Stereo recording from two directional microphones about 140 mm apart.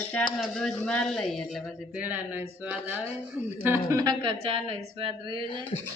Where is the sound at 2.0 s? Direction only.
10° right (ahead or behind).